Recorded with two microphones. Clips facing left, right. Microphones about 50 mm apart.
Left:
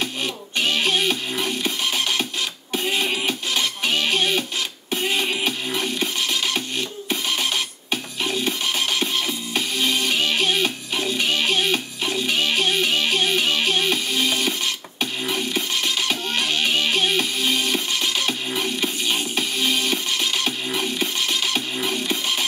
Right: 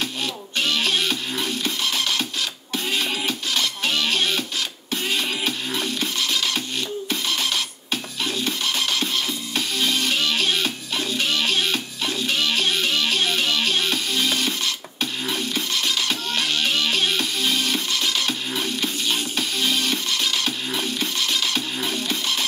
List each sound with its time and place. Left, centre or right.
0.0 s music: left